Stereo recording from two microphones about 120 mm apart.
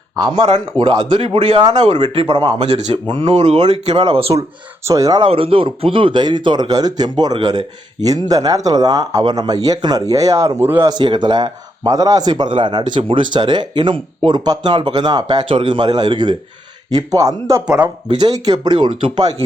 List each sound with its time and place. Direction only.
0.3 s speech: 50° right (ahead or behind)
1.2 s speech: 60° right (ahead or behind)
1.5 s speech: 40° right (ahead or behind)
3.3 s speech: 70° right (ahead or behind)
4.9 s speech: 30° right (ahead or behind)
5.2 s speech: 50° right (ahead or behind); by 10.8 s 20° right (ahead or behind)
10.8 s speech: 40° right (ahead or behind)